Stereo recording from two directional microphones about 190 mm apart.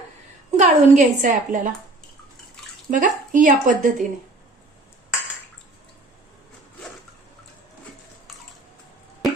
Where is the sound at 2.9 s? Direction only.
45° right (ahead or behind).